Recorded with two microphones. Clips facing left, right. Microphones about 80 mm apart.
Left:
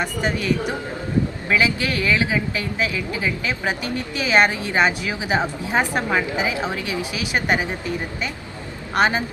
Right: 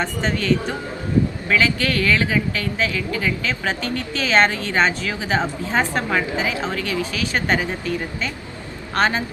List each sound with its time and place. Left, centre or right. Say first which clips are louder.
0.0 s speech: even; centre